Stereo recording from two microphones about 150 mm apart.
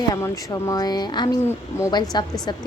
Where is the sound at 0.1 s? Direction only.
25° left (ahead or behind).